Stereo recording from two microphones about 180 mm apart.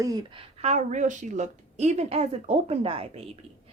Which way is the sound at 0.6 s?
40° right (ahead or behind).